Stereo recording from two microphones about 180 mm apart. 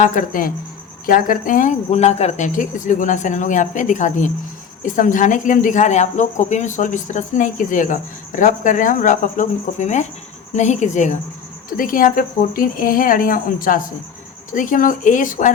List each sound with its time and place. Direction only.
0.0 s speech: 45° left (ahead or behind)